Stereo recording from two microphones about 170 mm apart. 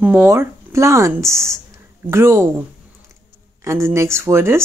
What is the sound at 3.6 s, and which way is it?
Speech, 15° right (ahead or behind).